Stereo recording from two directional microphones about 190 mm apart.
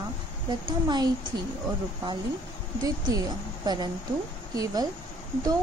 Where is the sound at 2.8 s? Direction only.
20° right (ahead or behind).